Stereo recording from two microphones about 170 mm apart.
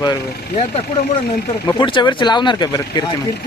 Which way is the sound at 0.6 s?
35° left (ahead or behind).